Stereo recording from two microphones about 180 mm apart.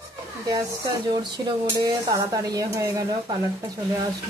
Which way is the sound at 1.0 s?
25° right (ahead or behind).